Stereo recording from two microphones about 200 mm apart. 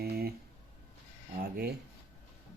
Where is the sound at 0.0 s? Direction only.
50° right (ahead or behind).